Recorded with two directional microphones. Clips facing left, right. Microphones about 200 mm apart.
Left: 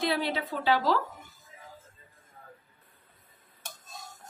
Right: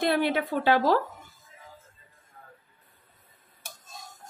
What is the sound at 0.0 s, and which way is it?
Speech, 55° right (ahead or behind).